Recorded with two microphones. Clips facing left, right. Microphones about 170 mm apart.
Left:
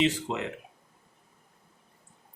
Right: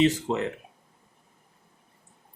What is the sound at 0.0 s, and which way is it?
Speech, 40° right (ahead or behind).